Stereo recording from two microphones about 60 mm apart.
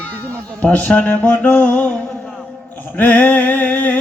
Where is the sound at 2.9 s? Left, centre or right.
Left.